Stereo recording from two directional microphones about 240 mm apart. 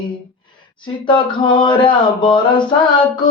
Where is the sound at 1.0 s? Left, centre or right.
Centre.